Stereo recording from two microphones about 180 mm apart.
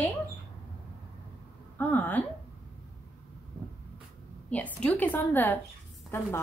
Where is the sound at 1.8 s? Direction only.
10° left (ahead or behind).